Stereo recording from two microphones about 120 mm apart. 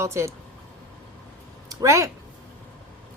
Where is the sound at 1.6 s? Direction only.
25° right (ahead or behind).